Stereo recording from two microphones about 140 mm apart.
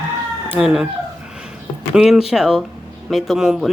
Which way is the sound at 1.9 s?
5° right (ahead or behind).